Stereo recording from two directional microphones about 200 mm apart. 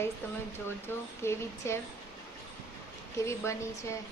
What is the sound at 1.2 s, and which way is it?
Speech, 15° left (ahead or behind).